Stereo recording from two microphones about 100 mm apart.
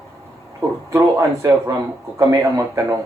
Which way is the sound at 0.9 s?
30° right (ahead or behind).